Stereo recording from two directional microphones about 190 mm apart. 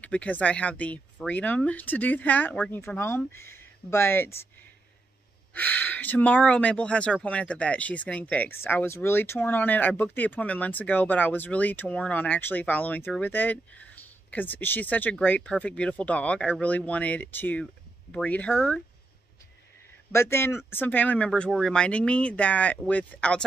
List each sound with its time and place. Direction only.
0.0 s speech: 5° left (ahead or behind)
5.5 s speech: 10° left (ahead or behind)
20.1 s speech: 15° left (ahead or behind)